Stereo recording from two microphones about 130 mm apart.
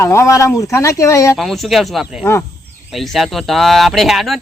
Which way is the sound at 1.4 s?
Centre (ahead or behind).